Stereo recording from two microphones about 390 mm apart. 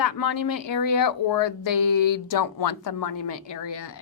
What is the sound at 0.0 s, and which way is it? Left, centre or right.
Speech, left.